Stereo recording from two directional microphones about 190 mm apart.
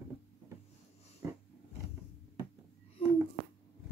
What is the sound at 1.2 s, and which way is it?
Roar, 15° right (ahead or behind).